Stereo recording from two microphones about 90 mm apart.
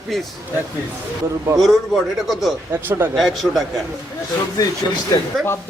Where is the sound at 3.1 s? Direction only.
Centre (ahead or behind).